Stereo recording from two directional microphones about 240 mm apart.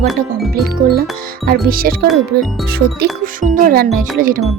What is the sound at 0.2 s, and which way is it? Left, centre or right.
Speech, right.